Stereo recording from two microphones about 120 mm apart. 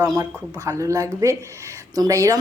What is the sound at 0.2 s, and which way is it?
A woman's voice, 30° right (ahead or behind).